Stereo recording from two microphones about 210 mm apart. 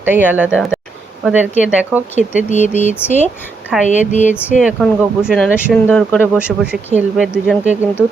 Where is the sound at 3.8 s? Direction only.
35° left (ahead or behind).